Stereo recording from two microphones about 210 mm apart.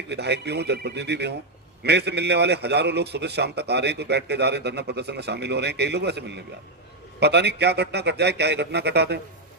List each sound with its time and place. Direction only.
0.1 s a man's voice: 50° right (ahead or behind)